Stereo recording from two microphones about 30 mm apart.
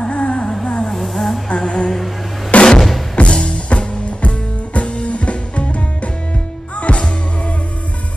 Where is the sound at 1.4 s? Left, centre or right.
Left.